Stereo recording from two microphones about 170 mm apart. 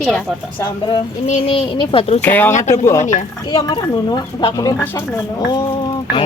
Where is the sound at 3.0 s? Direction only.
45° left (ahead or behind).